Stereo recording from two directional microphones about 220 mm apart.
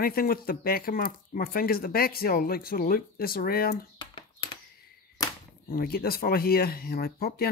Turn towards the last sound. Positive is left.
turn(degrees=45)  # may be behind; listen again after turning